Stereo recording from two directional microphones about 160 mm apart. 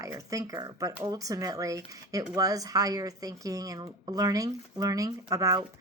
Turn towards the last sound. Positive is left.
turn(degrees=-20)  # may be behind; listen again after turning